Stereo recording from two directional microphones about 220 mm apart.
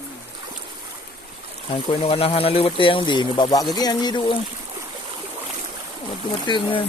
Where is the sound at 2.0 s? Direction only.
25° left (ahead or behind).